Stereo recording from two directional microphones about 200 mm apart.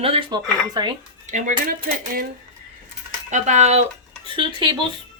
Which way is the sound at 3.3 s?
35° right (ahead or behind).